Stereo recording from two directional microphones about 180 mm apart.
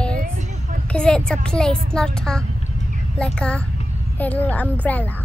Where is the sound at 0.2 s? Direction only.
45° right (ahead or behind).